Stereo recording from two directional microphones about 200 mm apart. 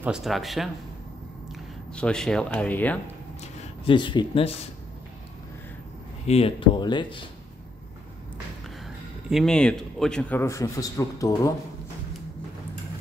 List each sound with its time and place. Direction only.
0.0 s speech: centre (ahead or behind)
3.6 s speech: 25° left (ahead or behind)
6.2 s speech: 30° left (ahead or behind)
9.3 s a man's voice: centre (ahead or behind)